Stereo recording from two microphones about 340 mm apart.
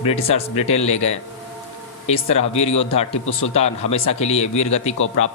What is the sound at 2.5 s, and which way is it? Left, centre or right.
Speech, centre.